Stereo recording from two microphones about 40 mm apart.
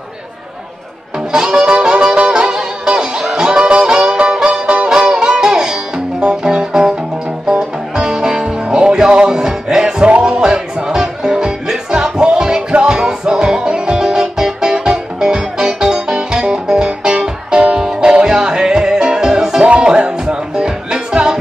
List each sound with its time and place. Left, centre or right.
1.3 s music: right
19.6 s music: right